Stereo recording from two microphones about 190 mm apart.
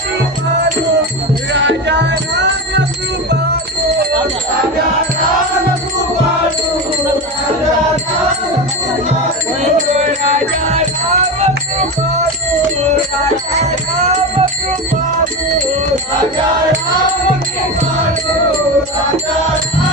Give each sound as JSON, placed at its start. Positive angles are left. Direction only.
{"t": 1.5, "sound": "music", "side_deg": -65}
{"t": 9.7, "sound": "music", "side_deg": -40}
{"t": 13.6, "sound": "music", "side_deg": -35}